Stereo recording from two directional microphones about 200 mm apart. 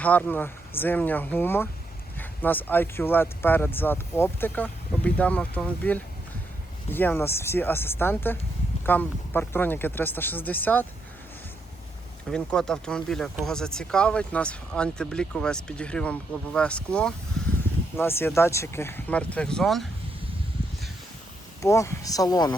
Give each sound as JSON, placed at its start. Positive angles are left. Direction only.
{"t": 0.0, "sound": "speech", "side_deg": 5}
{"t": 12.3, "sound": "speech", "side_deg": 5}
{"t": 17.4, "sound": "a sound", "side_deg": 0}
{"t": 17.9, "sound": "speech", "side_deg": 10}
{"t": 21.6, "sound": "speech", "side_deg": 15}